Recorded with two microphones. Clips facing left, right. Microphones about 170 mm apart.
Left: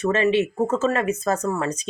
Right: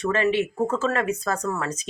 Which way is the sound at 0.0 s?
20° left (ahead or behind).